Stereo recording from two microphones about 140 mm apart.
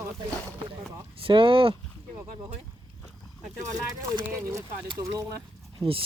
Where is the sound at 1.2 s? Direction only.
40° right (ahead or behind).